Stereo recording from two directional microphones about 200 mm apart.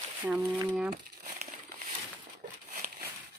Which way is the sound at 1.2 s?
35° right (ahead or behind).